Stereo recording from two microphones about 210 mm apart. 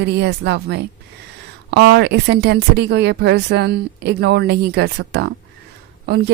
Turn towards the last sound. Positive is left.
turn(degrees=-50)  # may be behind; listen again after turning